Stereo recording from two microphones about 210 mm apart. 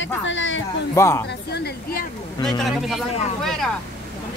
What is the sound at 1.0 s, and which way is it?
Speech, 15° left (ahead or behind).